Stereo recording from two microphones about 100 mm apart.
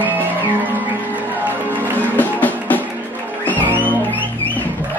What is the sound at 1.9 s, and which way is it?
Music, 15° left (ahead or behind).